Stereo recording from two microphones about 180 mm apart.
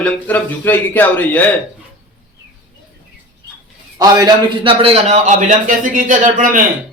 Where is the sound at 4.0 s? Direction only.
20° right (ahead or behind).